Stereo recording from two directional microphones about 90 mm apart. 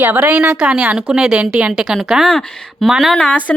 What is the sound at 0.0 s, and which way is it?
A woman's voice, 20° right (ahead or behind).